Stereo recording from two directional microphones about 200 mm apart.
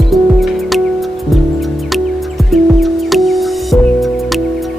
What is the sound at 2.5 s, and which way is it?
Music, centre (ahead or behind).